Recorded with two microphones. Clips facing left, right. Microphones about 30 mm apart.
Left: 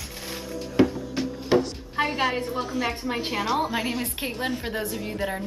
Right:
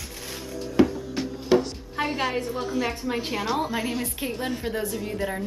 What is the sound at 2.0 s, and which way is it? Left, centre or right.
A woman's voice, centre.